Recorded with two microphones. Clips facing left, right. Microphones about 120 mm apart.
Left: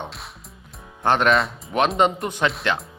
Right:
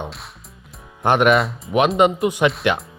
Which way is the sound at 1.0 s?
15° right (ahead or behind).